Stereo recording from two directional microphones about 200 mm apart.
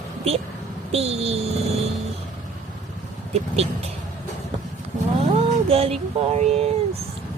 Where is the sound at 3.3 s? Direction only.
30° right (ahead or behind).